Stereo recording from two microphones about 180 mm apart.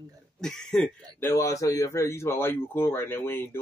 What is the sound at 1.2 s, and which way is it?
A man's voice, 20° left (ahead or behind).